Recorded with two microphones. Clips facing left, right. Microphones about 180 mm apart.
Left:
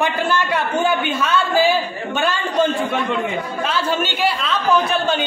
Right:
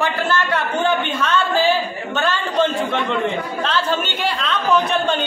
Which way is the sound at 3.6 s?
10° left (ahead or behind).